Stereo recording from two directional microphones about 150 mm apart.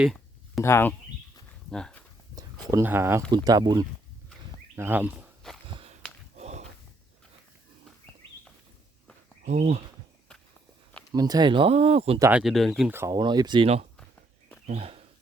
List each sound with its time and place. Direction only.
0.0 s a sound: centre (ahead or behind)
0.6 s speech: 15° left (ahead or behind)
2.3 s speech: 20° right (ahead or behind)
3.2 s speech: 30° right (ahead or behind)
4.7 s speech: 15° right (ahead or behind)
5.4 s a sound: 5° left (ahead or behind)
5.8 s a sound: 45° right (ahead or behind)
9.5 s speech: 50° right (ahead or behind)
11.1 s speech: 25° right (ahead or behind)
12.3 s speech: centre (ahead or behind)
12.9 s speech: 15° right (ahead or behind)
13.1 s speech: 30° right (ahead or behind)
14.7 s speech: 40° right (ahead or behind)